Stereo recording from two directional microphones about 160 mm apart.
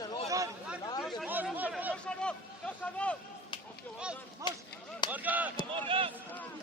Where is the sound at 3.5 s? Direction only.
30° left (ahead or behind).